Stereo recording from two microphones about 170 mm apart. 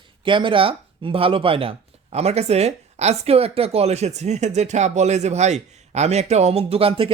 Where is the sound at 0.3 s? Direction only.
30° right (ahead or behind).